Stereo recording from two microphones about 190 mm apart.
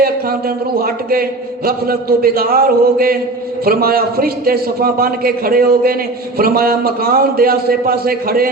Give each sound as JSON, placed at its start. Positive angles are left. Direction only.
{"t": 0.0, "sound": "a man's voice", "side_deg": -50}